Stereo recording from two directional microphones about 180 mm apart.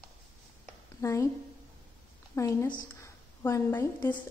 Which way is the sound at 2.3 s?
15° left (ahead or behind).